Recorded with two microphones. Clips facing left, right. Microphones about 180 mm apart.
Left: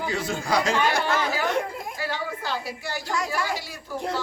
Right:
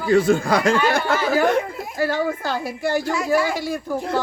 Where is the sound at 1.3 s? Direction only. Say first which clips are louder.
Right 8 dB; 50° right (ahead or behind).